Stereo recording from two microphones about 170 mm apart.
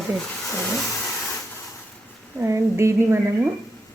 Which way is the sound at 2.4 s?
15° right (ahead or behind).